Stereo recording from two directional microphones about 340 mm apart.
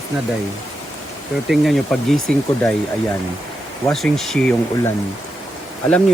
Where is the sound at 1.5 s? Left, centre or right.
Centre.